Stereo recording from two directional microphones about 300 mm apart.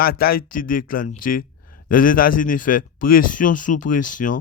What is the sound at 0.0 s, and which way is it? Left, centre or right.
Speech, left.